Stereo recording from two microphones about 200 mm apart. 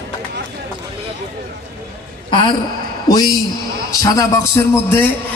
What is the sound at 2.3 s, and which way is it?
A woman's voice, 25° left (ahead or behind).